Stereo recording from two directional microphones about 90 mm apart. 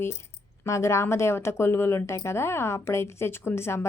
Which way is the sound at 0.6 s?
35° left (ahead or behind).